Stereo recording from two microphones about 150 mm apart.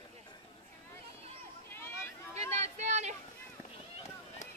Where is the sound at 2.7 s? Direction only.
50° right (ahead or behind).